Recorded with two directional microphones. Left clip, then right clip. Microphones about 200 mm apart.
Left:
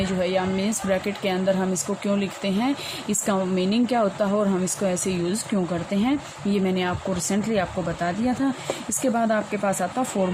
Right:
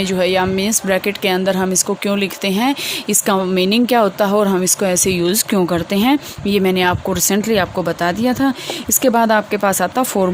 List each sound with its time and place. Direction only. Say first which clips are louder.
0.0 s speech: right 8 dB; 50° right (ahead or behind)